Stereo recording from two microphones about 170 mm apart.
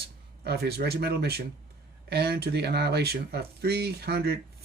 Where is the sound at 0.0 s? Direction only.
70° right (ahead or behind).